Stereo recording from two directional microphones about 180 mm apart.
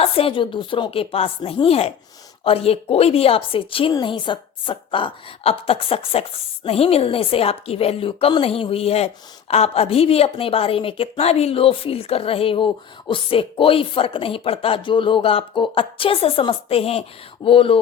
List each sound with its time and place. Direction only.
0.0 s a woman's voice: 30° left (ahead or behind)